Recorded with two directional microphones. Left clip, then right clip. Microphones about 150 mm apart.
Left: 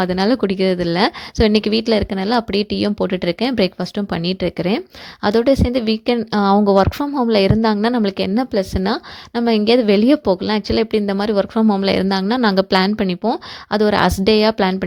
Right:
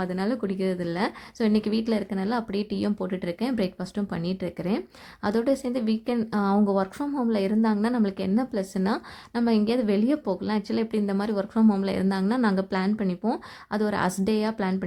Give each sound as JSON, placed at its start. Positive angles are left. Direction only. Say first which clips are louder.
{"t": 0.0, "sound": "a woman's voice", "louder": "left 12 dB", "side_deg": 55}